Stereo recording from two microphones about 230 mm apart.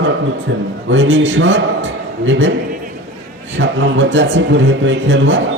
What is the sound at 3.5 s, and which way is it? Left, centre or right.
Speech, right.